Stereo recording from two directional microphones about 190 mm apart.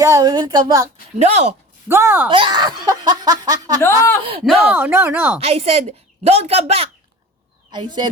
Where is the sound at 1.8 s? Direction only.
10° right (ahead or behind).